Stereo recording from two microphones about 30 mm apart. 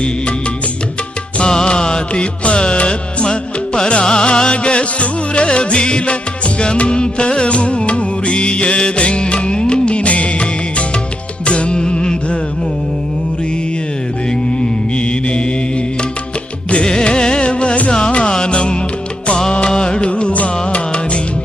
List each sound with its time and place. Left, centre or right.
1.4 s music: left
2.4 s music: left
14.3 s music: left
17.0 s music: left
19.6 s music: left
20.3 s music: left